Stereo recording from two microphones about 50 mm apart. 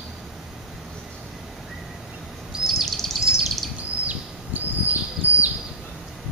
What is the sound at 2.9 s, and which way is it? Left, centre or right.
Bird, centre.